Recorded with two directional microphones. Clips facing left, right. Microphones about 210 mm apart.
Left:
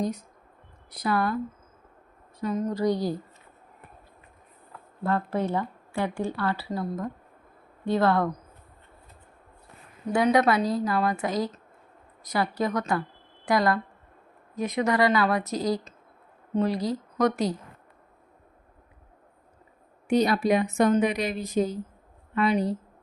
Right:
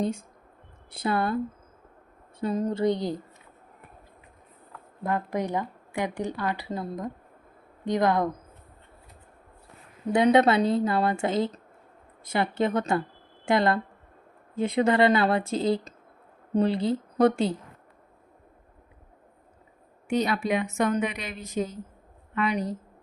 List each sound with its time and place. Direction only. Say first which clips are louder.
0.0 s a woman's voice: right 1 dB; 25° right (ahead or behind)
2.4 s a woman's voice: right 1 dB; 30° right (ahead or behind)
5.0 s speech: left 2 dB; 15° right (ahead or behind)
10.2 s a woman's voice: right 2 dB; 25° right (ahead or behind)
20.1 s speech: left 4 dB; 40° left (ahead or behind)